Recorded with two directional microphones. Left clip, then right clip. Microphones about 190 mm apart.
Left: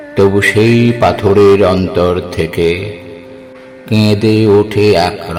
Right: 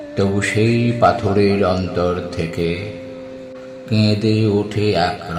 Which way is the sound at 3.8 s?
45° left (ahead or behind).